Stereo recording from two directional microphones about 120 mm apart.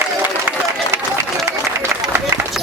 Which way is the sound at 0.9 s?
20° right (ahead or behind).